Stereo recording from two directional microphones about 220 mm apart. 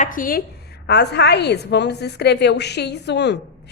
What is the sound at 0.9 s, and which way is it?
A woman's voice, 50° left (ahead or behind).